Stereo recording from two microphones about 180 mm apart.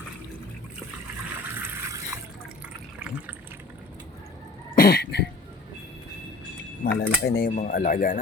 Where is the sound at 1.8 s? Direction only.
15° right (ahead or behind).